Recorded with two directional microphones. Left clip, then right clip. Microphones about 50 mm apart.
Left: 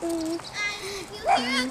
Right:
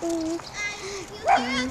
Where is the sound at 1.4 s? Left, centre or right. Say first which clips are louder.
Left 1 dB; left.